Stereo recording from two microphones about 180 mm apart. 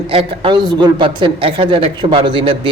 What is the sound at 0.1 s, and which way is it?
A man's voice, 30° right (ahead or behind).